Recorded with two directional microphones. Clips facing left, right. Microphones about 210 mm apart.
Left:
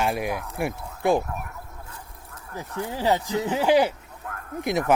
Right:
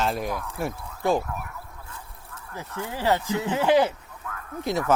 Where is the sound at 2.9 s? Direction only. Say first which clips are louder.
Left 1 dB; 15° left (ahead or behind).